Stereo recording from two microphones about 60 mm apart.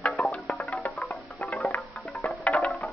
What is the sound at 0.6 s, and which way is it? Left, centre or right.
Music, left.